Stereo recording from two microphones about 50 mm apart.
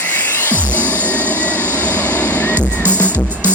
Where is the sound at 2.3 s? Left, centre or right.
Left.